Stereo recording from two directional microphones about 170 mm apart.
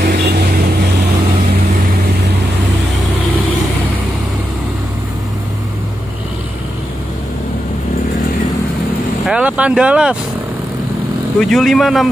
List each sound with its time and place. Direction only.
0.0 s vehicle: 70° right (ahead or behind)
9.2 s speech: 5° right (ahead or behind)
11.3 s speech: centre (ahead or behind)